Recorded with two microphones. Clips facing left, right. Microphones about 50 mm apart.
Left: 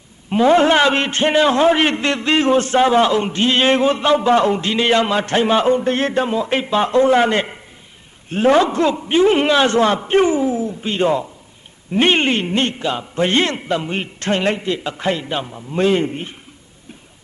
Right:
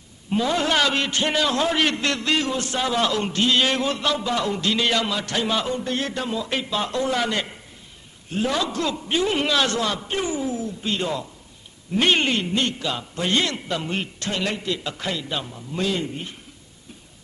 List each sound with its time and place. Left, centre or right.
0.3 s a man's voice: left
14.2 s a man's voice: left